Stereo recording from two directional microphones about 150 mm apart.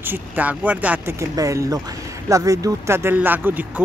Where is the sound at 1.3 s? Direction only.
20° right (ahead or behind).